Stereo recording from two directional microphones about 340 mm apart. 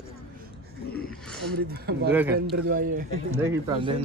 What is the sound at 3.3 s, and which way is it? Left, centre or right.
Speech, centre.